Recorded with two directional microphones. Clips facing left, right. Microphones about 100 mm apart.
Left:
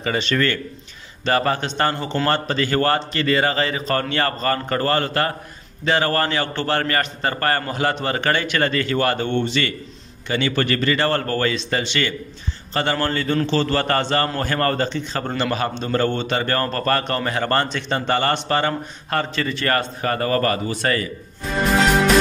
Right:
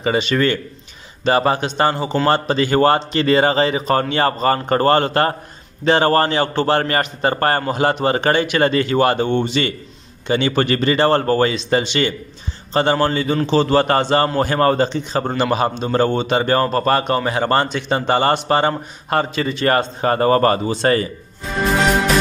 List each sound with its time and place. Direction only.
0.0 s a man's voice: 15° right (ahead or behind)
4.6 s a man's voice: 35° right (ahead or behind)